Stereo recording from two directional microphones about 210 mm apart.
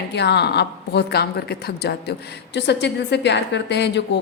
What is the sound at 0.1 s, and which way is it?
A woman's voice, 55° left (ahead or behind).